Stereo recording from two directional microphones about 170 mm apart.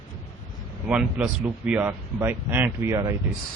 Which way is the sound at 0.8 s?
5° right (ahead or behind).